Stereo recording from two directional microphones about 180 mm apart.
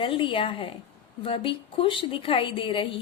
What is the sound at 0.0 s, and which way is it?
A woman's voice, 25° left (ahead or behind).